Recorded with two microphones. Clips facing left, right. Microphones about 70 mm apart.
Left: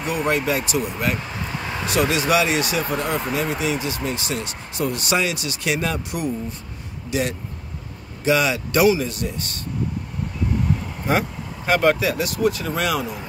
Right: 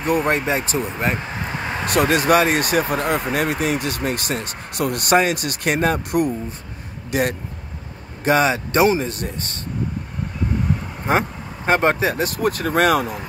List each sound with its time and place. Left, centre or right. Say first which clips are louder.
0.0 s speech: right 3 dB; right
1.9 s speech: right 4 dB; right
4.7 s speech: right 5 dB; right
11.1 s speech: right 2 dB; right